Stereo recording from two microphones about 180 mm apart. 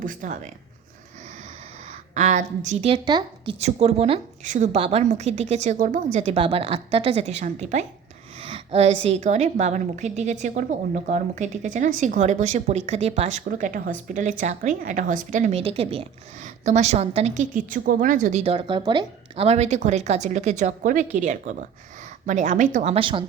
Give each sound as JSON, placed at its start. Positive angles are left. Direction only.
{"t": 0.0, "sound": "a woman's voice", "side_deg": -45}
{"t": 2.1, "sound": "a woman's voice", "side_deg": -45}
{"t": 3.1, "sound": "a woman's voice", "side_deg": -25}
{"t": 3.6, "sound": "a woman's voice", "side_deg": -35}